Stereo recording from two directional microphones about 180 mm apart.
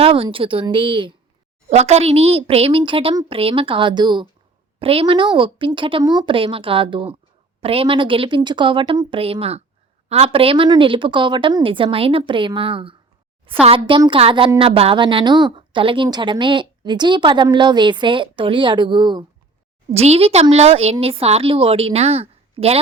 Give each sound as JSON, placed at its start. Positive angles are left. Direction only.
{"t": 0.0, "sound": "speech", "side_deg": -30}